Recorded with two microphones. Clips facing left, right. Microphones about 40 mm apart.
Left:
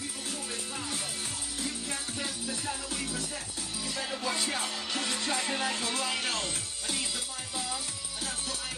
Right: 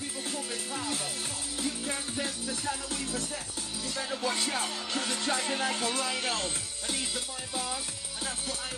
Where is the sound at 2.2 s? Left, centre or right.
Centre.